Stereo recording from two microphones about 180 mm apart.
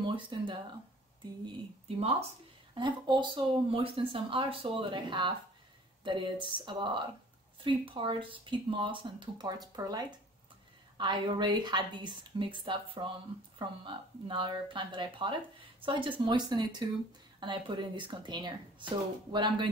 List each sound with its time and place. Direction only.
0.0 s speech: 25° right (ahead or behind)
2.7 s speech: 25° right (ahead or behind)